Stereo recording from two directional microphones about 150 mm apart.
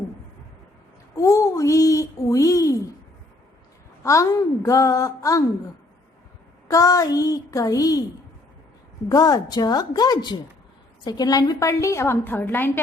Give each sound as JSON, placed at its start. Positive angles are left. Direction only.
{"t": 1.1, "sound": "a woman's voice", "side_deg": 20}
{"t": 4.0, "sound": "a woman's voice", "side_deg": 20}
{"t": 6.7, "sound": "a woman's voice", "side_deg": 25}
{"t": 9.0, "sound": "a woman's voice", "side_deg": 25}